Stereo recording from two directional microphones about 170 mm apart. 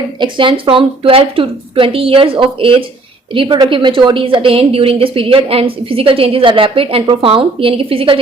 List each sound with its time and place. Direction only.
0.2 s a woman's voice: 30° right (ahead or behind)